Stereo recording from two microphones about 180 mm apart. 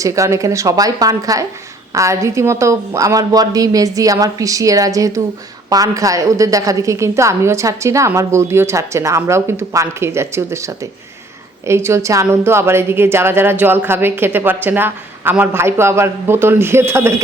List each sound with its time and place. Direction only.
0.0 s a woman's voice: 15° right (ahead or behind)
11.7 s a woman's voice: 15° right (ahead or behind)